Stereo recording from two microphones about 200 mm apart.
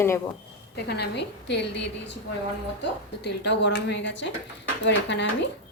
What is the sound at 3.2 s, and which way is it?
A woman's voice, 60° left (ahead or behind).